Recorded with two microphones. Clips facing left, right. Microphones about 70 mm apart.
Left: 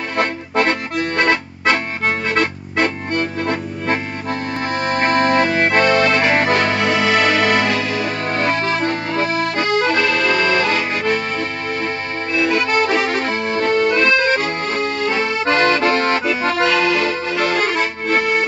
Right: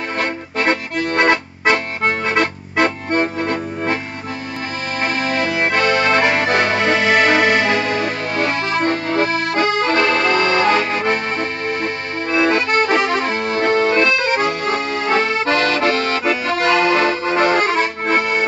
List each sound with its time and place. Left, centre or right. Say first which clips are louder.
0.7 s accordion: right 1 dB; right
4.8 s accordion: left 5 dB; left
6.5 s music: right 1 dB; right
9.8 s music: right 1 dB; right
12.3 s accordion: right 2 dB; right
13.5 s accordion: even; right
15.5 s accordion: left 3 dB; left
16.6 s accordion: right 4 dB; right